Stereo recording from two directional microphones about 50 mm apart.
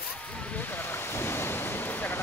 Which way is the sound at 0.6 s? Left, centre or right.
Left.